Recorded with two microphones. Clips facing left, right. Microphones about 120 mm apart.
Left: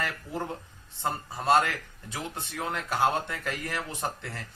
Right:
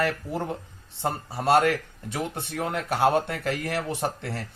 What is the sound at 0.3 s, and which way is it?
Speech, 65° right (ahead or behind).